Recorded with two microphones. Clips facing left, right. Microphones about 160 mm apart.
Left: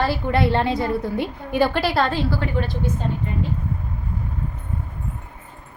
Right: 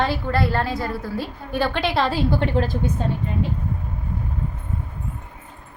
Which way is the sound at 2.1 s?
20° right (ahead or behind).